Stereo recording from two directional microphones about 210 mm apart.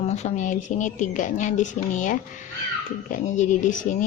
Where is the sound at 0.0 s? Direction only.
30° left (ahead or behind).